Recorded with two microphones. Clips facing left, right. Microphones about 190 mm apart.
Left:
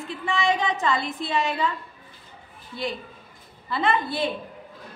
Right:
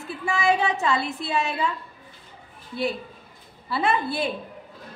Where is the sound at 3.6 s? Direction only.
5° right (ahead or behind).